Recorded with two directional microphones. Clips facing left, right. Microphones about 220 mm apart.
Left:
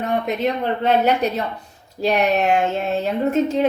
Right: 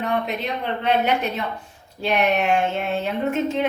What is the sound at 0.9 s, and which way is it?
Speech, 40° left (ahead or behind).